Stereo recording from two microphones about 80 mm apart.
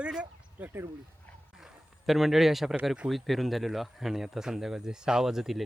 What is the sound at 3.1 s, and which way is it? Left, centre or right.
Speech, centre.